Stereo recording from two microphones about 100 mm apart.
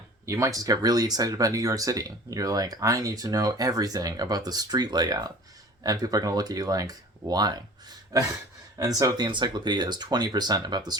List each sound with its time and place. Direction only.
0.3 s speech: 30° right (ahead or behind)